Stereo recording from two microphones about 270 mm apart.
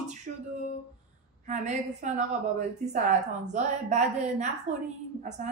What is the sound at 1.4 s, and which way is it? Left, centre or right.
A woman's voice, right.